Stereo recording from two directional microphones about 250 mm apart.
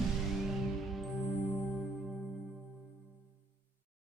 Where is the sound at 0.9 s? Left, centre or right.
Centre.